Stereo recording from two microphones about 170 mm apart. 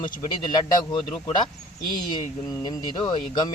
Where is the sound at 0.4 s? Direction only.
25° left (ahead or behind).